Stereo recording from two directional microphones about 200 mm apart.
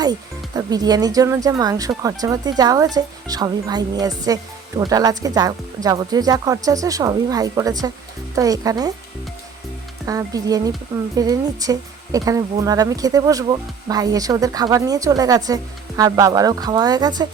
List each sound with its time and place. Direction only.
0.0 s speech: 20° right (ahead or behind)
10.1 s speech: 20° right (ahead or behind)